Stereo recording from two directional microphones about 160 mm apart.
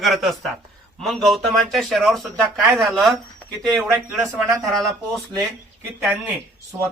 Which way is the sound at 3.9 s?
15° right (ahead or behind).